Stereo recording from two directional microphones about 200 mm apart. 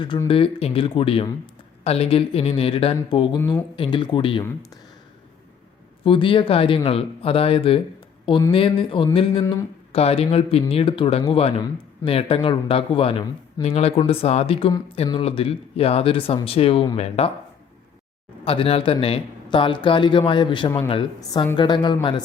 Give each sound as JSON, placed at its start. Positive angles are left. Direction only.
{"t": 0.0, "sound": "speech", "side_deg": 25}
{"t": 6.1, "sound": "speech", "side_deg": 25}
{"t": 9.4, "sound": "speech", "side_deg": 15}
{"t": 9.9, "sound": "speech", "side_deg": 30}
{"t": 18.4, "sound": "speech", "side_deg": 30}